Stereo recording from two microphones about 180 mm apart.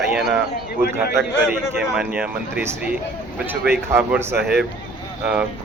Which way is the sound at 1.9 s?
5° right (ahead or behind).